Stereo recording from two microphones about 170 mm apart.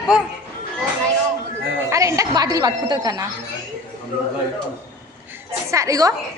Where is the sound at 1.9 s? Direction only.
20° right (ahead or behind).